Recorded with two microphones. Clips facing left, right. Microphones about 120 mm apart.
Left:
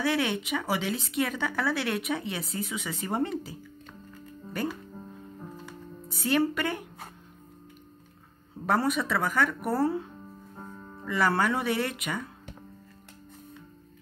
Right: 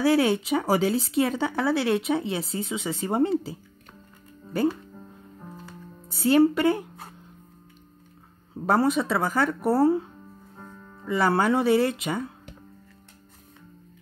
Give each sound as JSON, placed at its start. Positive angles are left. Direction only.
{"t": 0.0, "sound": "speech", "side_deg": -35}
{"t": 6.0, "sound": "speech", "side_deg": -30}
{"t": 8.6, "sound": "speech", "side_deg": -30}
{"t": 11.1, "sound": "speech", "side_deg": -30}